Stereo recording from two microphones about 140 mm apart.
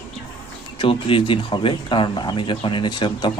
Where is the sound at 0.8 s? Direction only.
40° left (ahead or behind).